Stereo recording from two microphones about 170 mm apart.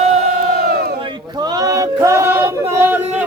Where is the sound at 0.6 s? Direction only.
65° right (ahead or behind).